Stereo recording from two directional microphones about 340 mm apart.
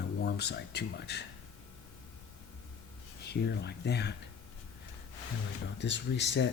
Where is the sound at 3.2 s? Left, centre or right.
Left.